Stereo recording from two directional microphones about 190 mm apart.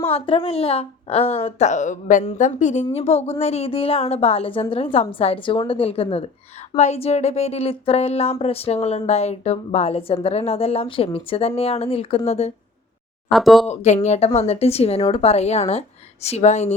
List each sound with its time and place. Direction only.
0.1 s a woman's voice: 30° left (ahead or behind)
13.3 s speech: centre (ahead or behind)
13.7 s speech: 35° left (ahead or behind)